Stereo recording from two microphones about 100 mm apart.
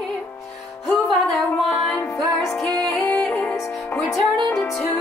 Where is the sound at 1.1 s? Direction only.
Centre (ahead or behind).